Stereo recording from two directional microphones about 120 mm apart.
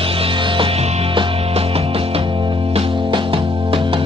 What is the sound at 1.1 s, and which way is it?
Music, 50° right (ahead or behind).